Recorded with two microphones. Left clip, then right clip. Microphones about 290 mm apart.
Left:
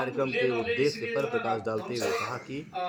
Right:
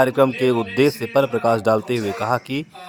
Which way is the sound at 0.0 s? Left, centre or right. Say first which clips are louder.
Right 11 dB; right.